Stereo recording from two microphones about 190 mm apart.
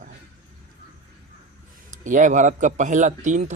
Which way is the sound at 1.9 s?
40° right (ahead or behind).